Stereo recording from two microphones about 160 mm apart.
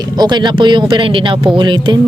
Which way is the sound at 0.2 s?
25° right (ahead or behind).